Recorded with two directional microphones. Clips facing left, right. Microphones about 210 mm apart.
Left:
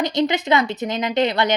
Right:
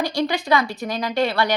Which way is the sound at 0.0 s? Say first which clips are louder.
Left 3 dB; 20° left (ahead or behind).